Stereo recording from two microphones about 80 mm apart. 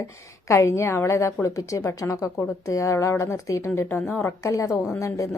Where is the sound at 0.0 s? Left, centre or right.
Left.